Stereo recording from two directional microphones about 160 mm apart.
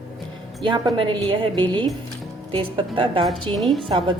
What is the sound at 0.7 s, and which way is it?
A woman's voice, 30° right (ahead or behind).